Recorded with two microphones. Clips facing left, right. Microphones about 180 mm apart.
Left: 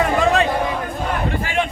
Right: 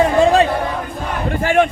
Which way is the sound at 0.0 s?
30° right (ahead or behind).